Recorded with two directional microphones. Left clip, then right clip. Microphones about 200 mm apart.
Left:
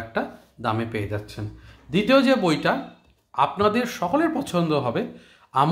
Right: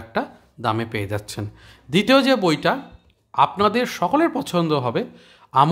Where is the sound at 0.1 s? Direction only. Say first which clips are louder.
Right 4 dB; 30° right (ahead or behind).